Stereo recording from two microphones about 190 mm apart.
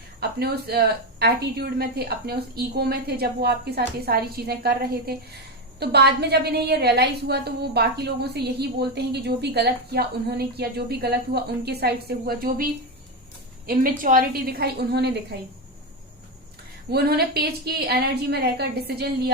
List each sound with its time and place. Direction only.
0.2 s a woman's voice: 55° right (ahead or behind)
13.7 s a woman's voice: 50° right (ahead or behind)
16.9 s a woman's voice: 55° right (ahead or behind)